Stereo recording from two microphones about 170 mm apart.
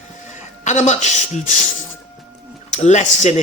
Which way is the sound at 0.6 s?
45° left (ahead or behind).